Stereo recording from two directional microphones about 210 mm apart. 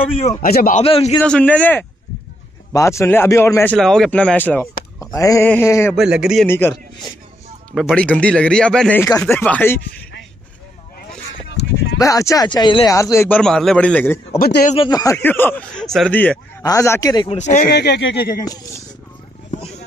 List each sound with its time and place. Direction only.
0.4 s speech: 45° left (ahead or behind)
0.8 s speech: 25° left (ahead or behind)
1.2 s speech: 5° left (ahead or behind)
5.9 s a man's voice: 5° right (ahead or behind)
6.4 s speech: 10° left (ahead or behind)
7.7 s speech: 5° left (ahead or behind)
12.0 s speech: 15° left (ahead or behind)
14.4 s speech: 40° left (ahead or behind)
14.8 s speech: 20° left (ahead or behind)
17.4 s speech: 35° left (ahead or behind)
17.6 s speech: 50° left (ahead or behind)